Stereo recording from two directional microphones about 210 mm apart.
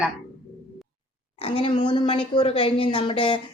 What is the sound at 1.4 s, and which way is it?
A woman's voice, 25° left (ahead or behind).